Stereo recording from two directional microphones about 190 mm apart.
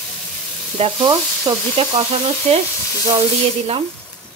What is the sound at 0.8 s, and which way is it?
Frying, 25° right (ahead or behind).